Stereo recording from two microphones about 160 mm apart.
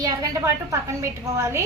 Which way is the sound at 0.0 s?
20° right (ahead or behind).